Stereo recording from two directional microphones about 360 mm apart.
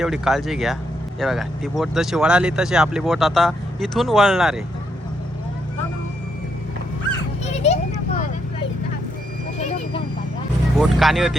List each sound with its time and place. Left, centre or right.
0.0 s speech: centre
7.4 s a sound: centre
10.8 s speech: centre